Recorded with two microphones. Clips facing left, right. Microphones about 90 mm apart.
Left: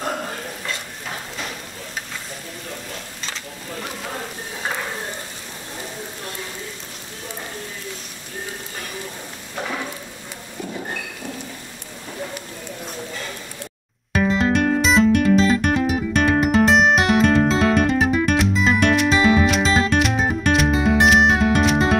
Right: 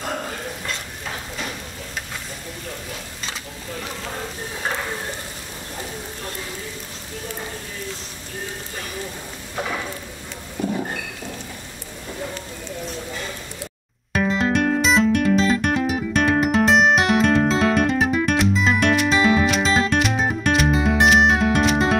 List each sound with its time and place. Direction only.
14.1 s music: centre (ahead or behind)